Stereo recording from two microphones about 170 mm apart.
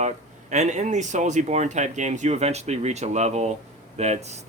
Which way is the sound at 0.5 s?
45° right (ahead or behind).